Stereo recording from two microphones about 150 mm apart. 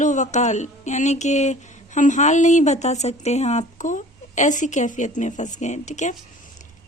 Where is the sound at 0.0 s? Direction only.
55° left (ahead or behind).